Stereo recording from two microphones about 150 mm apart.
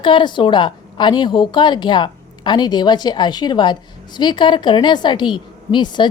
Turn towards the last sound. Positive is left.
turn(degrees=30)  # may be behind; listen again after turning